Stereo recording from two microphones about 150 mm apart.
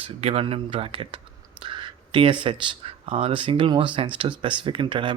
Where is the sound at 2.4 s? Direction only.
40° right (ahead or behind).